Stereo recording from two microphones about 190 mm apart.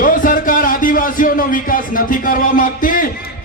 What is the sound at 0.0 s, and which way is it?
Music, 45° left (ahead or behind).